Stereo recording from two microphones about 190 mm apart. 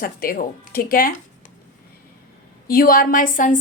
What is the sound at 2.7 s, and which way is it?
Speech, 50° left (ahead or behind).